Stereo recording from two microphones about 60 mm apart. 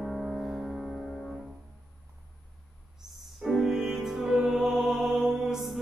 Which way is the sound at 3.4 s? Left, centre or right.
Centre.